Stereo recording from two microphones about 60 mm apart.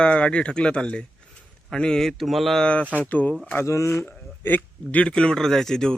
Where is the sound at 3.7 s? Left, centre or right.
Left.